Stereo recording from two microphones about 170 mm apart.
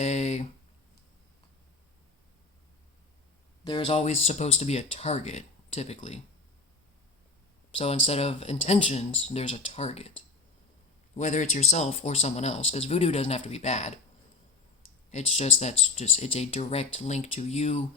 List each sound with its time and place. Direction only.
0.0 s a sound: 45° left (ahead or behind)
3.6 s speech: 30° left (ahead or behind)
7.8 s speech: 35° left (ahead or behind)
11.2 s speech: 45° left (ahead or behind)
15.1 s speech: 40° left (ahead or behind)